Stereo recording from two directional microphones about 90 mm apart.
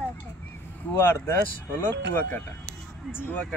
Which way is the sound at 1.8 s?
20° left (ahead or behind).